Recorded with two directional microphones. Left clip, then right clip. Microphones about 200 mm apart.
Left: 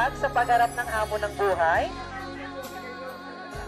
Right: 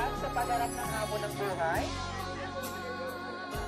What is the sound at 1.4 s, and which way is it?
Speech, 50° left (ahead or behind).